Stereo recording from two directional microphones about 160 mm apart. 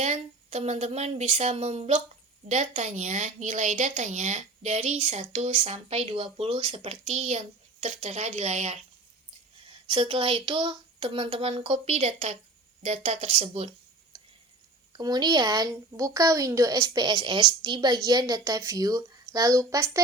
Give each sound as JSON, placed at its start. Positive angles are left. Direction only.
{"t": 0.0, "sound": "a woman's voice", "side_deg": -45}
{"t": 9.9, "sound": "a woman's voice", "side_deg": -35}
{"t": 14.9, "sound": "a woman's voice", "side_deg": -25}